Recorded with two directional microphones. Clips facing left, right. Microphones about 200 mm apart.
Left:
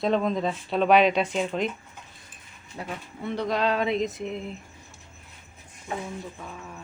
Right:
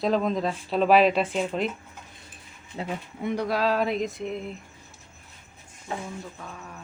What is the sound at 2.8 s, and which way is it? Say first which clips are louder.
Speech: right 3 dB; 15° right (ahead or behind).